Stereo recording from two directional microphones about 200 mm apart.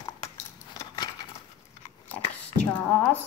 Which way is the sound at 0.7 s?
20° left (ahead or behind).